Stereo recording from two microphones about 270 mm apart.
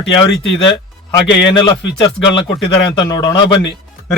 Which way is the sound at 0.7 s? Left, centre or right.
Centre.